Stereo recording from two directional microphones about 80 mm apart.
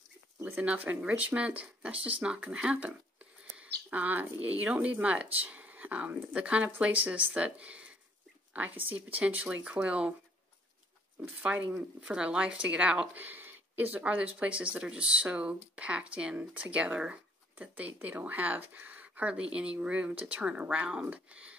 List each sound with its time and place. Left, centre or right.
0.4 s speech: right
11.4 s speech: centre